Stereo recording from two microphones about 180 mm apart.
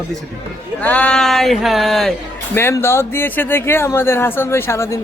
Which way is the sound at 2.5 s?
15° left (ahead or behind).